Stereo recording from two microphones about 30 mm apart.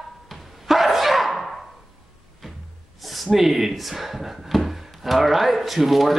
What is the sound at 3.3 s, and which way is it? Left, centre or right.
A man's voice, centre.